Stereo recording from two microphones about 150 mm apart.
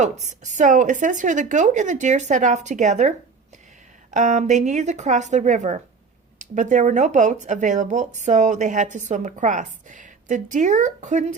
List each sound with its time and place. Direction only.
0.0 s speech: 50° right (ahead or behind)
4.1 s speech: 55° right (ahead or behind)